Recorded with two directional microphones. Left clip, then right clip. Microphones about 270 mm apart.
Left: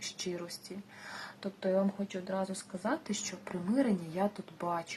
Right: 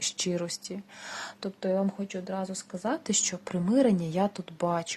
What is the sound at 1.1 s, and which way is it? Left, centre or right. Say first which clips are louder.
Speech: right 5 dB; right.